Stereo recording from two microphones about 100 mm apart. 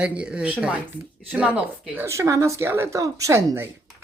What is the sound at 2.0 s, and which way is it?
Speech, 30° right (ahead or behind).